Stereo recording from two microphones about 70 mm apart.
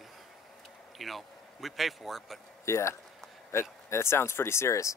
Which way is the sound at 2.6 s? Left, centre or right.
Left.